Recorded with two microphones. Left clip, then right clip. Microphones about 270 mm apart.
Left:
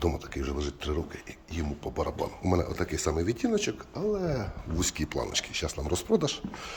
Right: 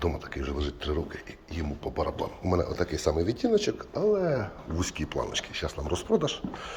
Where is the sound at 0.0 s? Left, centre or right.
Left.